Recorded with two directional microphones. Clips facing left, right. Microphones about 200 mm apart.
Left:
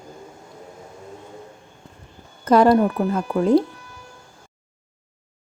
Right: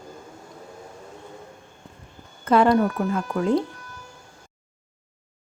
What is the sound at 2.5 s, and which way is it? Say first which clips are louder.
Speech: left 3 dB; 40° left (ahead or behind).